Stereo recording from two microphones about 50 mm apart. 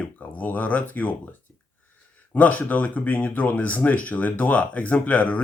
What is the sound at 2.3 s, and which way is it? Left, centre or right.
Speech, left.